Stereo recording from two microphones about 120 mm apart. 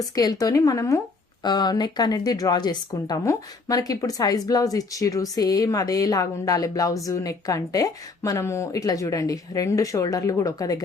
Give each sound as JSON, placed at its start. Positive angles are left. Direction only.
{"t": 0.0, "sound": "a woman's voice", "side_deg": 30}
{"t": 1.5, "sound": "a woman's voice", "side_deg": 35}